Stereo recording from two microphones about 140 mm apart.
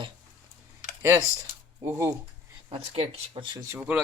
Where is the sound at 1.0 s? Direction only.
20° right (ahead or behind).